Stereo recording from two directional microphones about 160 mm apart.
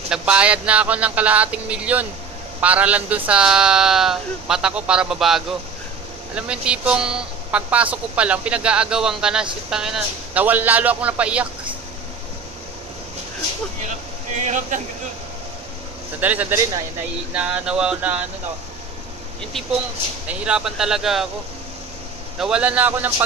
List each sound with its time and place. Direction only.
0.1 s speech: 5° right (ahead or behind)
14.3 s speech: 50° right (ahead or behind)
16.2 s speech: 10° right (ahead or behind)
20.2 s speech: 5° right (ahead or behind)
22.4 s speech: 5° right (ahead or behind)